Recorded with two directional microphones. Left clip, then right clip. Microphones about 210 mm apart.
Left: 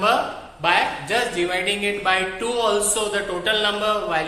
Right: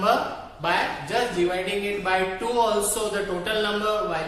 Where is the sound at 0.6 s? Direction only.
15° left (ahead or behind).